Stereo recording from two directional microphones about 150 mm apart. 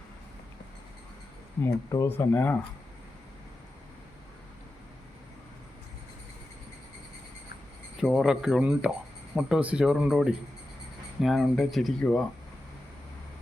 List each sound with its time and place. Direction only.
1.6 s speech: 20° left (ahead or behind)
7.9 s speech: centre (ahead or behind)